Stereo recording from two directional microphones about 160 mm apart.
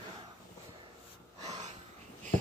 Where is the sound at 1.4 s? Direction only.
45° right (ahead or behind).